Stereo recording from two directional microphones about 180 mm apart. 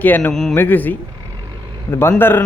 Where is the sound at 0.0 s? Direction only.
10° left (ahead or behind).